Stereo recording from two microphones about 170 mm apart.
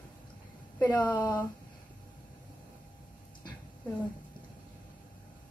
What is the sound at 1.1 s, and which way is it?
Speech, 25° left (ahead or behind).